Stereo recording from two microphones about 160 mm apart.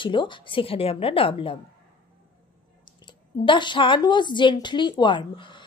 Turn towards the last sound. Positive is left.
turn(degrees=30)  # may be behind; listen again after turning